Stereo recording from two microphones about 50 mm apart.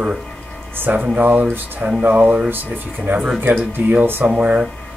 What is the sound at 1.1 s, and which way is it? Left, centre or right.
Speech, right.